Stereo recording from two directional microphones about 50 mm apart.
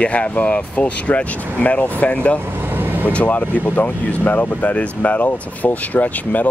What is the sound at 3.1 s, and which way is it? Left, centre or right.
Speech, left.